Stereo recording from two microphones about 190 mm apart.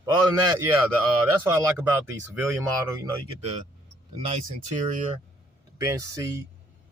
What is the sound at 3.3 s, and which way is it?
Speech, 30° right (ahead or behind).